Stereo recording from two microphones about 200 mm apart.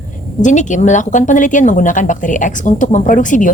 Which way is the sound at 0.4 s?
40° left (ahead or behind).